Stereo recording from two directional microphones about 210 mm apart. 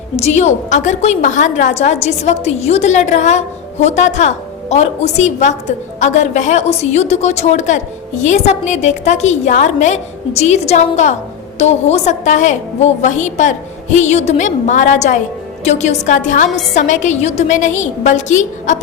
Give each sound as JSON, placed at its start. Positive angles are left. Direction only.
{"t": 0.2, "sound": "a woman's voice", "side_deg": 30}